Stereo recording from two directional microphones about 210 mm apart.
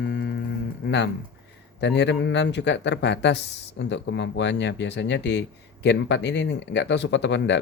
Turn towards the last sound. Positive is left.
turn(degrees=55)  # may be behind; listen again after turning